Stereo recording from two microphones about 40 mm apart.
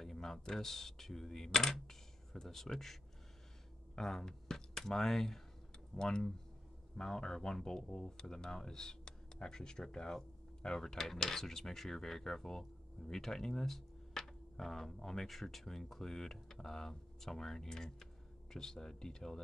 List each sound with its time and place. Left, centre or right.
0.0 s speech: centre